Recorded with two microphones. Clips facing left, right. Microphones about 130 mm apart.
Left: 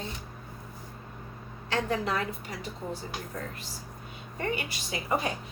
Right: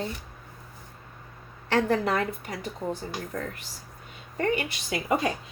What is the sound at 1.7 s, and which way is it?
Speech, 65° right (ahead or behind).